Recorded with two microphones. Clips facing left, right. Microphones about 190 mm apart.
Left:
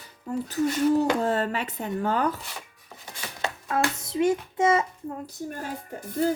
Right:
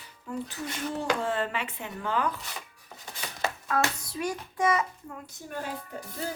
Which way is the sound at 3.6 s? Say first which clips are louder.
Left 3 dB; 25° left (ahead or behind).